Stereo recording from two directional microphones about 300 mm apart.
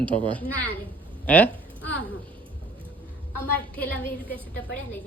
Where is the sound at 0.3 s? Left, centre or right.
Centre.